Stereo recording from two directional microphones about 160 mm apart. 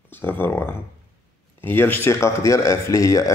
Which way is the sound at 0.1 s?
10° left (ahead or behind).